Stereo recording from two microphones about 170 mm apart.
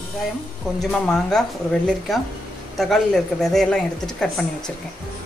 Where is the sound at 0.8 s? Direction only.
5° left (ahead or behind).